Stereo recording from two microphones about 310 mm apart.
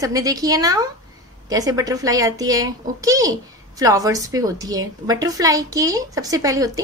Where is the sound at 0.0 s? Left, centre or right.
Centre.